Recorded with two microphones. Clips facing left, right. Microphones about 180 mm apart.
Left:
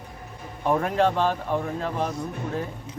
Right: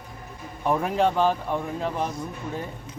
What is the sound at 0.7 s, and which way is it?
Speech, 5° right (ahead or behind).